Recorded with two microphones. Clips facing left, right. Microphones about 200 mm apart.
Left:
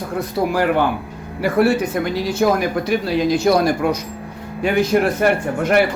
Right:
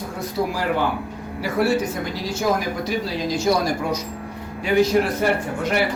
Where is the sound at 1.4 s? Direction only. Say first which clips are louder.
Left 4 dB; 55° left (ahead or behind).